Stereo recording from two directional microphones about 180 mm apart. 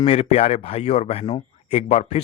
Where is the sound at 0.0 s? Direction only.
35° left (ahead or behind).